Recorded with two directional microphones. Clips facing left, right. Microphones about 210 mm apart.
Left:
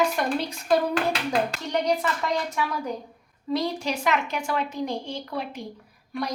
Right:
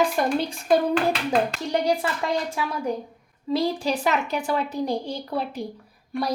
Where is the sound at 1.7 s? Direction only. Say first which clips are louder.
Right 1 dB; 30° right (ahead or behind).